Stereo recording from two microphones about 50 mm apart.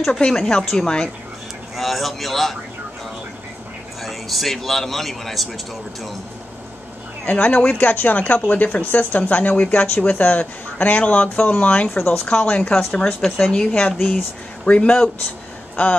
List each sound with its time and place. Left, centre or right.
0.2 s speech: centre
1.8 s a man's voice: centre
4.0 s a man's voice: centre
7.2 s speech: left
13.7 s speech: left